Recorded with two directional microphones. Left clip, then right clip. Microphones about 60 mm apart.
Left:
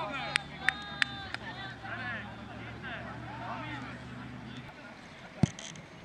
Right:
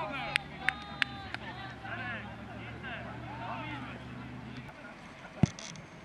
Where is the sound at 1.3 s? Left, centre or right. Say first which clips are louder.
Left 1 dB; centre.